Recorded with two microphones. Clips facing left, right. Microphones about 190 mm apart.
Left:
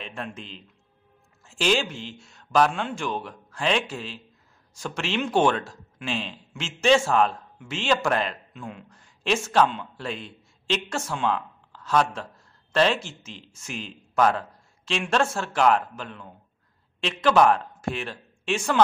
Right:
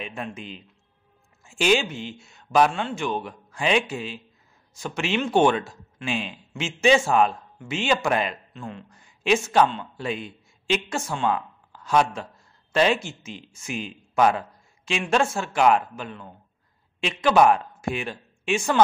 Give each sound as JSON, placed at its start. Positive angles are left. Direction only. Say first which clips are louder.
{"t": 0.0, "sound": "speech", "louder": "right 2 dB", "side_deg": -10}
{"t": 8.5, "sound": "a man's voice", "louder": "right 2 dB", "side_deg": 5}
{"t": 8.9, "sound": "a man's voice", "louder": "right 4 dB", "side_deg": -5}